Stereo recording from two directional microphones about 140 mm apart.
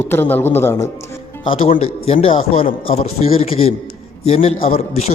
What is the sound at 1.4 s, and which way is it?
A man's voice, 40° left (ahead or behind).